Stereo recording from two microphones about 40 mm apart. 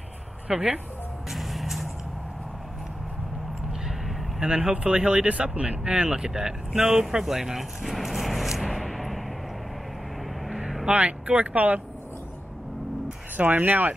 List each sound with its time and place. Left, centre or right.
0.5 s speech: right
1.3 s vehicle: centre
4.4 s speech: centre
7.8 s a sound: centre
10.9 s speech: right
13.4 s speech: right